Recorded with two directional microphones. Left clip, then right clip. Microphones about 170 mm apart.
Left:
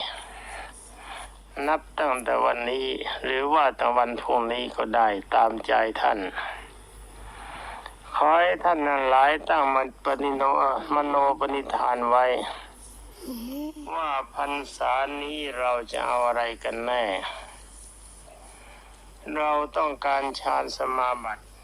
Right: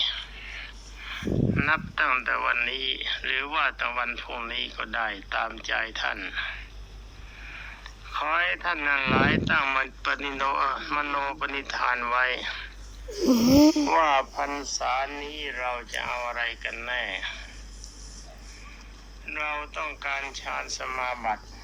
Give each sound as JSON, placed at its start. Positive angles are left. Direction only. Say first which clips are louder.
{"t": 0.0, "sound": "speech", "louder": "right 5 dB", "side_deg": 35}
{"t": 13.1, "sound": "a sound", "louder": "right 17 dB", "side_deg": -40}
{"t": 13.8, "sound": "speech", "louder": "right 7 dB", "side_deg": 0}
{"t": 14.4, "sound": "speech", "louder": "left 2 dB", "side_deg": 15}
{"t": 19.2, "sound": "speech", "louder": "left 6 dB", "side_deg": 35}
{"t": 20.9, "sound": "speech", "louder": "left 5 dB", "side_deg": 20}